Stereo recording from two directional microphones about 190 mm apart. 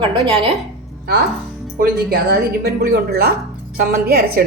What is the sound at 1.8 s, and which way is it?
A woman's voice, 55° right (ahead or behind).